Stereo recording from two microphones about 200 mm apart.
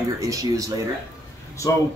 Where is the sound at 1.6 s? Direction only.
15° left (ahead or behind).